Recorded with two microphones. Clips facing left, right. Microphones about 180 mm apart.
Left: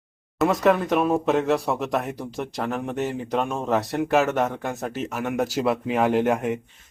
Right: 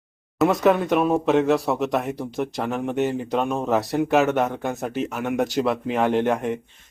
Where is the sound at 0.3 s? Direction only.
Centre (ahead or behind).